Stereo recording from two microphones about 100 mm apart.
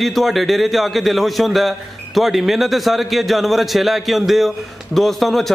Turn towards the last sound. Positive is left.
turn(degrees=0)  # may be behind; listen again after turning